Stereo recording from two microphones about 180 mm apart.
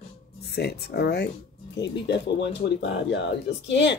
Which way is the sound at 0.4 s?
65° left (ahead or behind).